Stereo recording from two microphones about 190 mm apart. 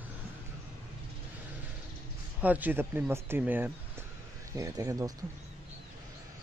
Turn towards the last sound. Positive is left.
turn(degrees=-20)  # may be behind; listen again after turning